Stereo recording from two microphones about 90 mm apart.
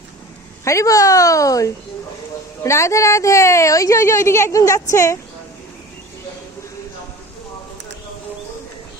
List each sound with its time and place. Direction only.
0.6 s a woman's voice: 35° left (ahead or behind)